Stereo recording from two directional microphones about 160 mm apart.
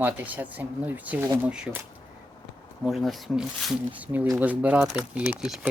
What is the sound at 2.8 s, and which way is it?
Speech, centre (ahead or behind).